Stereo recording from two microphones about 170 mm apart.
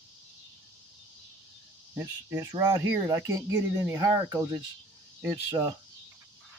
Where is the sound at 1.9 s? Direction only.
20° right (ahead or behind).